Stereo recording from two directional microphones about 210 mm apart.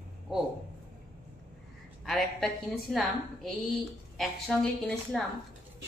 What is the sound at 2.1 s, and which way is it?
A woman's voice, centre (ahead or behind).